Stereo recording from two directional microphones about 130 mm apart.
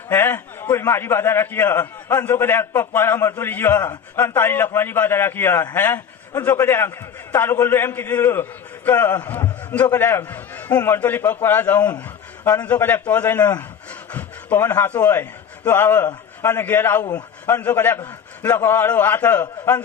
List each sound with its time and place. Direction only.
0.1 s a man's voice: 15° left (ahead or behind)